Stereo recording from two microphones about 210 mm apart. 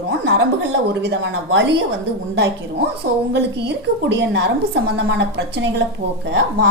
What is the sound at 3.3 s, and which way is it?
A woman's voice, 55° right (ahead or behind).